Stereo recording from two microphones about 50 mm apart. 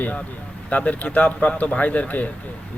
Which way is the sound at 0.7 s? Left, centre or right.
Left.